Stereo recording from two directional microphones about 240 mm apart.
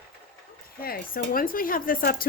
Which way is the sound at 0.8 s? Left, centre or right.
Left.